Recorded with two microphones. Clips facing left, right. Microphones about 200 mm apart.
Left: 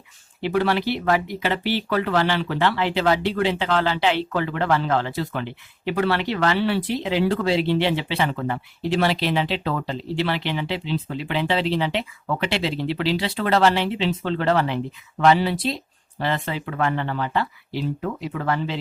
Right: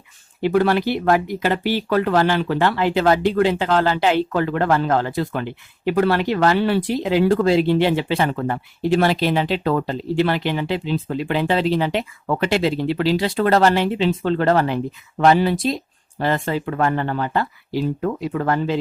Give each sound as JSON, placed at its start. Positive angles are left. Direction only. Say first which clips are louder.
{"t": 0.4, "sound": "speech", "louder": "right 4 dB", "side_deg": -50}